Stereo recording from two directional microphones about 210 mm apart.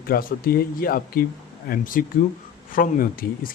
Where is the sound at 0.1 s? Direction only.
45° left (ahead or behind).